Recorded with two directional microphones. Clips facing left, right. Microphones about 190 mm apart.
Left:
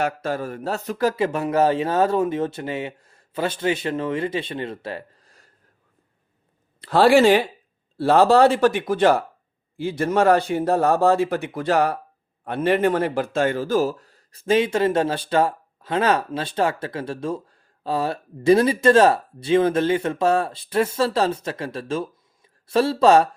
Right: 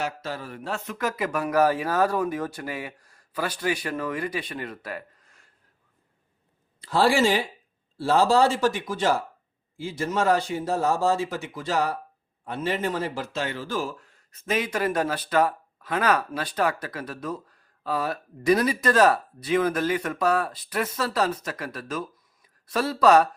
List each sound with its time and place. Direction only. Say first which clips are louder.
0.0 s speech: left 7 dB; 50° left (ahead or behind); by 5.5 s 35° left (ahead or behind)
6.8 s speech: left 6 dB; 65° left (ahead or behind); by 23.3 s 25° left (ahead or behind)